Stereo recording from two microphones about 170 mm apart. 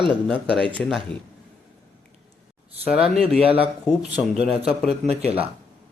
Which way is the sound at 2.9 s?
5° right (ahead or behind).